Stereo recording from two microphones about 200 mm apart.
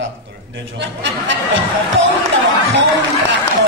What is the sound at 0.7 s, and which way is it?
Speech, 70° right (ahead or behind).